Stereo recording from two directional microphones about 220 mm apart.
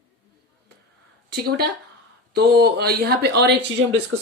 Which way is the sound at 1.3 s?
45° right (ahead or behind).